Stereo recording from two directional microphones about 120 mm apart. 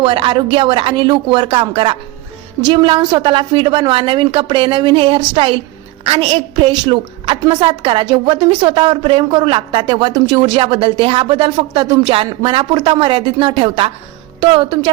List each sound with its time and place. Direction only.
0.0 s a woman's voice: 45° right (ahead or behind)